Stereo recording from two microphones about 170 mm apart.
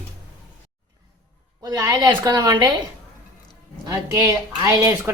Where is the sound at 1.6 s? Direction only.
20° right (ahead or behind).